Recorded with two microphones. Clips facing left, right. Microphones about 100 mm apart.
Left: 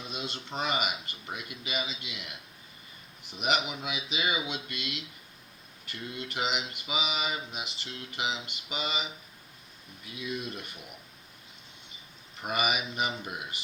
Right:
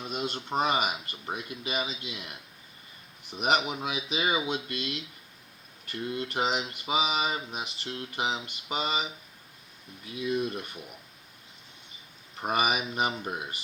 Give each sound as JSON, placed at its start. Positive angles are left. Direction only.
{"t": 0.5, "sound": "mantra", "side_deg": -40}
{"t": 3.3, "sound": "mantra", "side_deg": -40}
{"t": 10.2, "sound": "mantra", "side_deg": -40}
{"t": 12.4, "sound": "mantra", "side_deg": -40}